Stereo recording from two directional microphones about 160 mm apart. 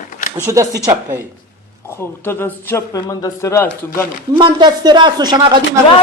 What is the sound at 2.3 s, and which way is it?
A man's voice, 15° left (ahead or behind).